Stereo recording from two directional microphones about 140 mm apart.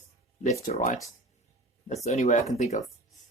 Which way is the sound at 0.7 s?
55° left (ahead or behind).